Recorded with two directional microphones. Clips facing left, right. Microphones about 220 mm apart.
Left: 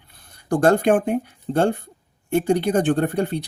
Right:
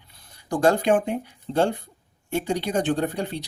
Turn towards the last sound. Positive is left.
turn(degrees=55)  # may be behind; listen again after turning